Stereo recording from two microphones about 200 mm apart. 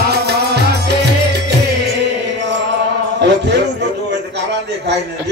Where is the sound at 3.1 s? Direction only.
60° right (ahead or behind).